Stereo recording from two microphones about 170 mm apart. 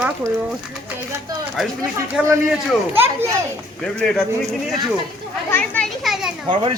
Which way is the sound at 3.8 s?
5° left (ahead or behind).